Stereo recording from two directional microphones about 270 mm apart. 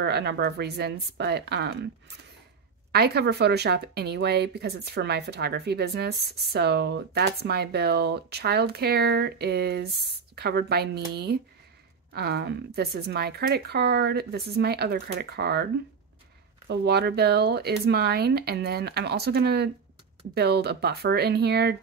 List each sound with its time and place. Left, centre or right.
0.0 s speech: right
16.6 s speech: right